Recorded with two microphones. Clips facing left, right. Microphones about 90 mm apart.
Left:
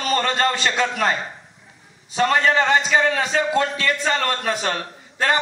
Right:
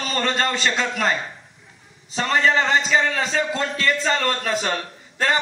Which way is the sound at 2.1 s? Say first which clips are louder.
Left 2 dB; 40° left (ahead or behind).